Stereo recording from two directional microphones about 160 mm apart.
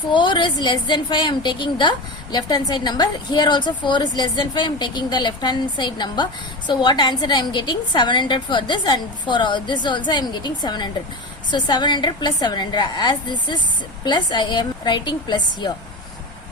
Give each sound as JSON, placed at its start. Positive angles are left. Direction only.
{"t": 0.1, "sound": "a woman's voice", "side_deg": 30}